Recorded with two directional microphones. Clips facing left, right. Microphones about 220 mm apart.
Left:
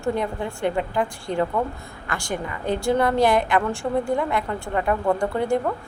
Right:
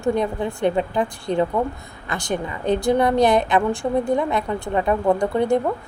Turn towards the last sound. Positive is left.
turn(degrees=-20)  # may be behind; listen again after turning